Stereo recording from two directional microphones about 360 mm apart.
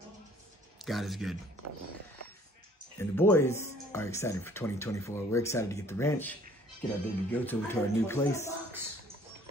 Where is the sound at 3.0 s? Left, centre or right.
Centre.